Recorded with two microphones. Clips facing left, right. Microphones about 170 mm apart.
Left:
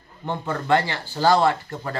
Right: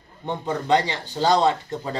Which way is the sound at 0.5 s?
20° right (ahead or behind).